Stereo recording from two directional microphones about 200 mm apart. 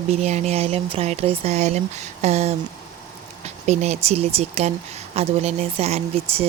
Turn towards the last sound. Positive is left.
turn(degrees=-30)  # may be behind; listen again after turning